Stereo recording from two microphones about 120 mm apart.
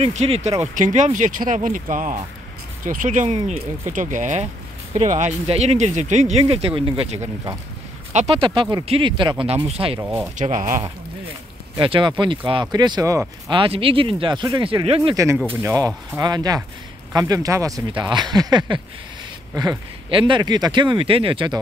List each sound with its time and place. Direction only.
0.0 s speech: 60° right (ahead or behind)
0.7 s speech: 90° right; by 6.4 s 75° right (ahead or behind)
6.4 s speech: 50° right (ahead or behind)
8.1 s speech: 75° right (ahead or behind)
8.4 s speech: 45° right (ahead or behind)
10.3 s speech: 90° right
11.8 s speech: 45° right (ahead or behind)
13.5 s speech: 45° right (ahead or behind)
14.7 s speech: 50° right (ahead or behind)
15.2 s speech: 25° right (ahead or behind)
17.9 s speech: 40° right (ahead or behind)
20.1 s speech: 45° right (ahead or behind)